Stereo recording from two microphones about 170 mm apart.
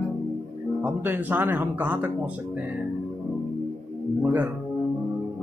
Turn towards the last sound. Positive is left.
turn(degrees=-10)  # may be behind; listen again after turning